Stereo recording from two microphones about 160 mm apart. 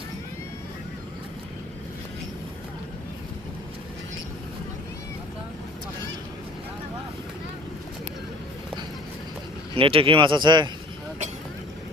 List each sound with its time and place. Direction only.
9.7 s speech: 35° right (ahead or behind)